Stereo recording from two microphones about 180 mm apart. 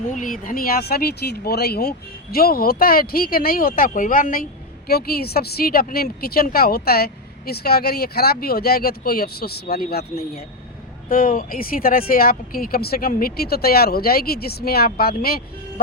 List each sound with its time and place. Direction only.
0.1 s a woman's voice: 45° left (ahead or behind)